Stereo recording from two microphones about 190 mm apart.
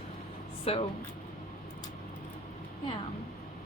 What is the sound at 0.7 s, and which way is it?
Speech, 30° left (ahead or behind).